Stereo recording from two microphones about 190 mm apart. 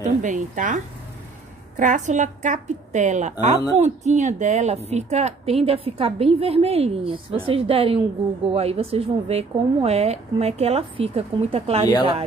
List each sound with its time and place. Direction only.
0.0 s a woman's voice: 40° right (ahead or behind)